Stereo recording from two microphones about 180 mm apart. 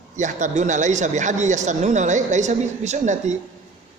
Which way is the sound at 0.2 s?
45° right (ahead or behind).